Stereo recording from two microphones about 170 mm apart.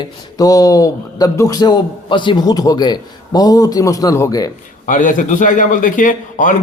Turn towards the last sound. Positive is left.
turn(degrees=50)  # may be behind; listen again after turning